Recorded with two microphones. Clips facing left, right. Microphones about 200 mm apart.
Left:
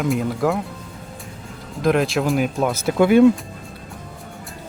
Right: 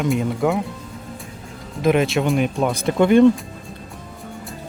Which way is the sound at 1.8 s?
Centre (ahead or behind).